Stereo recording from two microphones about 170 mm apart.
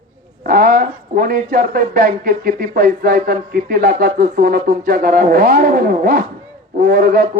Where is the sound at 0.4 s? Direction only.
60° right (ahead or behind).